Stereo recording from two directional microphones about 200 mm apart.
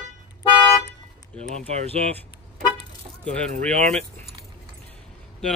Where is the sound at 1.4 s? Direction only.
30° right (ahead or behind).